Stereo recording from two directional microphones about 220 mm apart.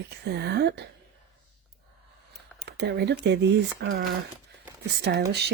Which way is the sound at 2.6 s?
50° right (ahead or behind).